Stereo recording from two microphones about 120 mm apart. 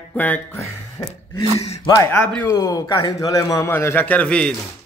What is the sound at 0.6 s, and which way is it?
A man's voice, 30° left (ahead or behind).